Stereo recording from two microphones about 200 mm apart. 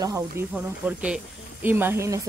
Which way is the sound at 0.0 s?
15° right (ahead or behind).